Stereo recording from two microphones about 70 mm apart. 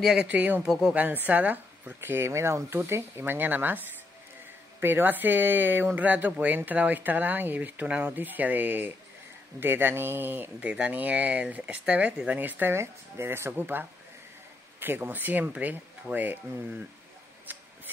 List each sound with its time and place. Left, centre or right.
0.0 s speech: centre
0.3 s speech: right
0.7 s speech: centre
0.9 s speech: right
10.6 s speech: centre
12.7 s speech: right
17.5 s a sound: right